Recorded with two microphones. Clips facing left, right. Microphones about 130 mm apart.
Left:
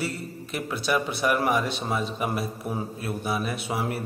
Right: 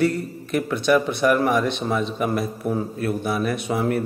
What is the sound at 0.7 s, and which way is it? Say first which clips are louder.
Speech: right 6 dB; 5° left (ahead or behind).